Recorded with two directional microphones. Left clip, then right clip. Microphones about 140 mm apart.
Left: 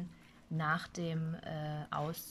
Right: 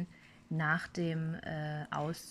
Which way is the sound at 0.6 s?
Centre (ahead or behind).